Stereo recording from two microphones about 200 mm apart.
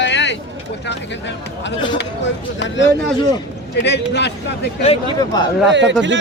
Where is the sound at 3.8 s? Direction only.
60° left (ahead or behind).